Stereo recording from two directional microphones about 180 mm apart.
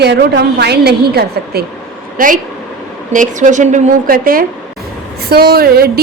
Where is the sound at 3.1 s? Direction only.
45° right (ahead or behind).